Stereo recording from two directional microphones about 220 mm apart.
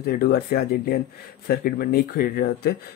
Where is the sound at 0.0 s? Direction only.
45° left (ahead or behind).